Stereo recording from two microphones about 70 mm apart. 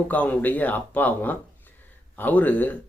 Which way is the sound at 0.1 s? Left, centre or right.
Left.